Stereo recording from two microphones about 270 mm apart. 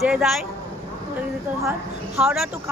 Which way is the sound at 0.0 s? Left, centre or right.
Centre.